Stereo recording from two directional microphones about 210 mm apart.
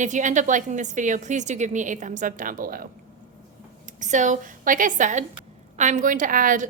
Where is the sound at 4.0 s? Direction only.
35° right (ahead or behind).